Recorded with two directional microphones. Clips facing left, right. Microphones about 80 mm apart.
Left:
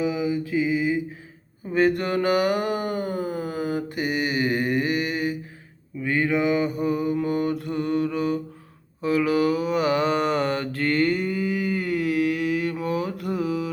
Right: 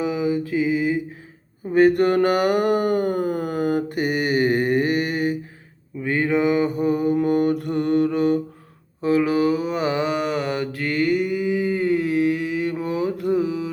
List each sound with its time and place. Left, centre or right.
0.0 s mantra: right
6.0 s mantra: right
9.0 s mantra: right
10.1 s mantra: centre; by 13.7 s right